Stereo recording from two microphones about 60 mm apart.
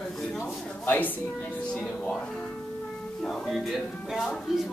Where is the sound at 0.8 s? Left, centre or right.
Left.